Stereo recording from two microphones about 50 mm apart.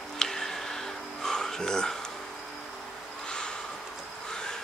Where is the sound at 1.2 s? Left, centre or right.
Centre.